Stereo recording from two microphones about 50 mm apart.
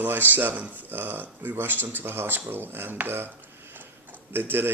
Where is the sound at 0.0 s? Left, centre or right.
Right.